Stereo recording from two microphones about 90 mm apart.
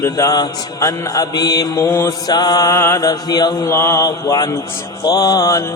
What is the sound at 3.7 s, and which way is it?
A man's voice, 30° left (ahead or behind).